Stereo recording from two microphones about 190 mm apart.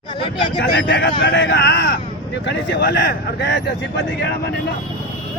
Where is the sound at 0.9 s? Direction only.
65° left (ahead or behind).